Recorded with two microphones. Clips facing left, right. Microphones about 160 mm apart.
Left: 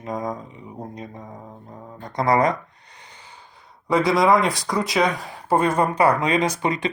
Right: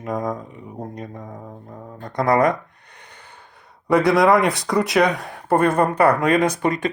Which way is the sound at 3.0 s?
55° right (ahead or behind).